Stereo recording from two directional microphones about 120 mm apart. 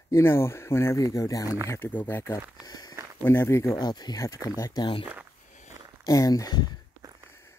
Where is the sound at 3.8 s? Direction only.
35° left (ahead or behind).